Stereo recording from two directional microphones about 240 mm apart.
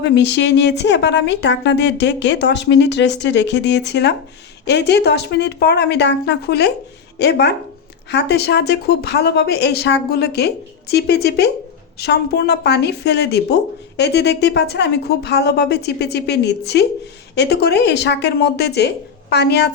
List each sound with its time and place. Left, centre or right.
0.0 s a woman's voice: left